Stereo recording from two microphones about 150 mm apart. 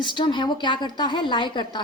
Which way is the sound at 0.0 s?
30° left (ahead or behind).